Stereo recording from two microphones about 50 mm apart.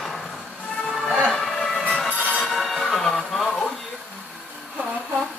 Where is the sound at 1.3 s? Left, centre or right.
Centre.